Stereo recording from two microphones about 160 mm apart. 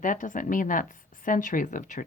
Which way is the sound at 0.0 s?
55° left (ahead or behind).